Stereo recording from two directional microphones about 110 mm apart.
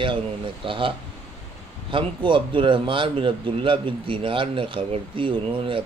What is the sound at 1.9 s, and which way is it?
Speech, 50° right (ahead or behind).